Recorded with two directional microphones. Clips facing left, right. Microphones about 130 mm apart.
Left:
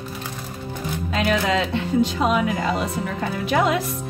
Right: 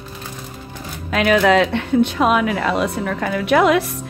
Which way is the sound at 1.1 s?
70° right (ahead or behind).